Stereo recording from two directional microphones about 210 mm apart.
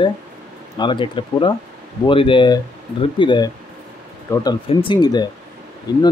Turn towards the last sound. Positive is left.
turn(degrees=20)  # may be behind; listen again after turning